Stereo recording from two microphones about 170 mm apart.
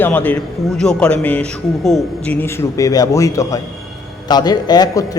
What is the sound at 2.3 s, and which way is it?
A man's voice, 15° left (ahead or behind).